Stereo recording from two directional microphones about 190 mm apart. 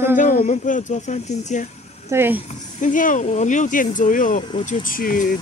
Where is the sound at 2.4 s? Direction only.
45° left (ahead or behind).